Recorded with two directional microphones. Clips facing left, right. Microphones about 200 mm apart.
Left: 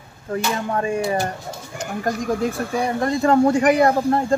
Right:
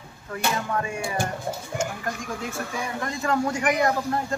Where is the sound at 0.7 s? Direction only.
35° left (ahead or behind).